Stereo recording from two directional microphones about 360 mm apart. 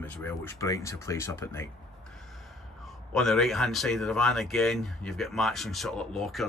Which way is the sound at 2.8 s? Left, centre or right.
Centre.